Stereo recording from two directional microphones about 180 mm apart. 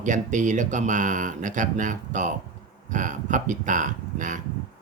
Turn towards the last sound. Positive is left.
turn(degrees=-45)  # may be behind; listen again after turning